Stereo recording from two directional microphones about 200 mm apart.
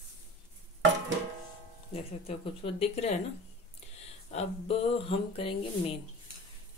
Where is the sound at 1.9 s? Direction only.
30° left (ahead or behind).